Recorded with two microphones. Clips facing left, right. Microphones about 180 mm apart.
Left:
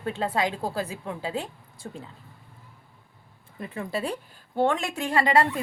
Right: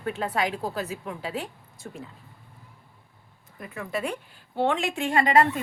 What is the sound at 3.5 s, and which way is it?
Speech, 30° left (ahead or behind).